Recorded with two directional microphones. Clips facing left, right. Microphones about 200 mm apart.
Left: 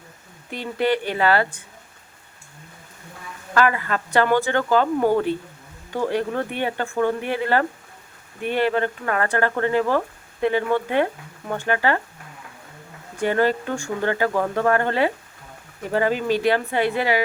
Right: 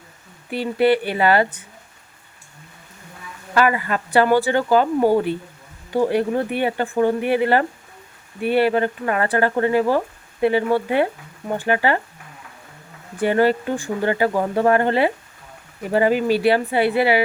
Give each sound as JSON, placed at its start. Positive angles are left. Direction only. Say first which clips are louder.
{"t": 0.5, "sound": "speech", "louder": "right 5 dB", "side_deg": -10}
{"t": 3.5, "sound": "speech", "louder": "right 2 dB", "side_deg": -10}
{"t": 13.2, "sound": "speech", "louder": "right 3 dB", "side_deg": -10}